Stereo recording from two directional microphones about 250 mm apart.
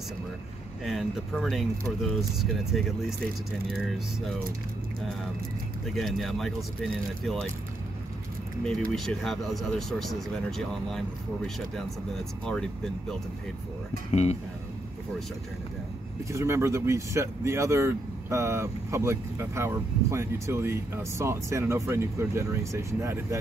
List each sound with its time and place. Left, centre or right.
0.8 s speech: centre
5.9 s speech: centre
8.9 s speech: centre
14.1 s speech: left
16.3 s speech: centre